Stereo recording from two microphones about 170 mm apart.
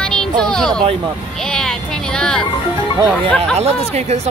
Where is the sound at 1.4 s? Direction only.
5° left (ahead or behind).